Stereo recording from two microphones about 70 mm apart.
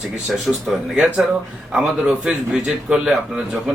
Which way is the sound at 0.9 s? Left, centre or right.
Centre.